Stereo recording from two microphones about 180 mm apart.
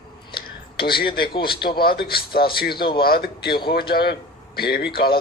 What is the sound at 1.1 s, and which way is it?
A man's voice, 60° left (ahead or behind).